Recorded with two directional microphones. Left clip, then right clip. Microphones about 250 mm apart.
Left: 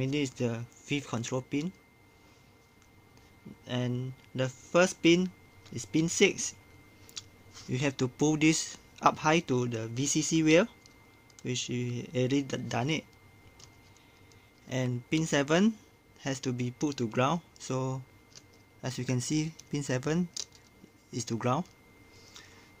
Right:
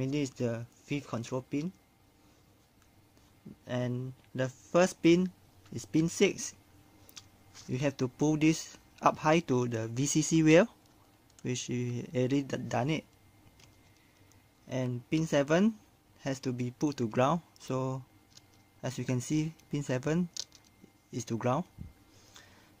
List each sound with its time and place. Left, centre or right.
0.0 s speech: centre
3.6 s speech: centre
7.2 s a sound: centre
7.7 s speech: centre
14.7 s speech: centre